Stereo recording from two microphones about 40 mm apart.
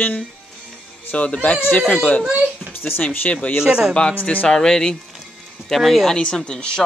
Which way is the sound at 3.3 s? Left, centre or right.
Left.